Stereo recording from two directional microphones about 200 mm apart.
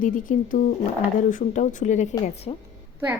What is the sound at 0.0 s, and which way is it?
Speech, 40° left (ahead or behind).